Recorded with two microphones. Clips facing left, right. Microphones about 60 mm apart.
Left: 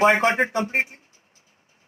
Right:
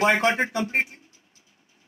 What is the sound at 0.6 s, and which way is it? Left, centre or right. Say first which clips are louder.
Speech: left 1 dB; centre.